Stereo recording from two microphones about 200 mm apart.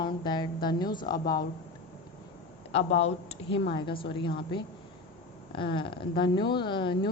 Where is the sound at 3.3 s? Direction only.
25° left (ahead or behind).